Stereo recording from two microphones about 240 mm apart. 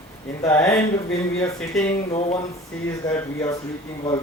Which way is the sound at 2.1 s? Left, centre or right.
Left.